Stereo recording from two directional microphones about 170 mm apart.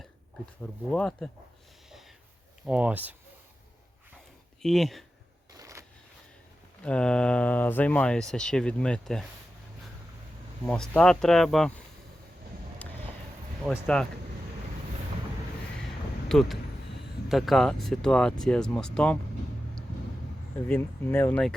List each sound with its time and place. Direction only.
0.6 s speech: 5° left (ahead or behind)
1.9 s a sound: centre (ahead or behind)
2.6 s speech: 10° right (ahead or behind)
4.6 s speech: centre (ahead or behind)
5.5 s a sound: 20° right (ahead or behind)
6.8 s speech: 5° left (ahead or behind)
10.7 s speech: 5° left (ahead or behind)
13.7 s speech: 5° left (ahead or behind)
16.3 s speech: centre (ahead or behind)
20.7 s speech: 10° left (ahead or behind)